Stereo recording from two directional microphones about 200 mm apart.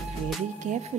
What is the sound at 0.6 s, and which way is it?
Speech, 35° right (ahead or behind).